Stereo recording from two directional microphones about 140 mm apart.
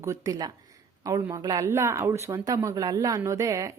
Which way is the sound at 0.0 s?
20° right (ahead or behind).